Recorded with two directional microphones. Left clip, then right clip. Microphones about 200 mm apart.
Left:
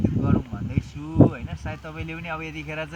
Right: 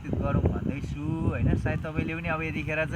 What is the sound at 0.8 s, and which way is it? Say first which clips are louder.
Speech: left 12 dB; 5° left (ahead or behind).